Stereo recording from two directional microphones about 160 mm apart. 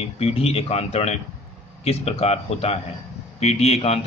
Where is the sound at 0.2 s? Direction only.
40° left (ahead or behind).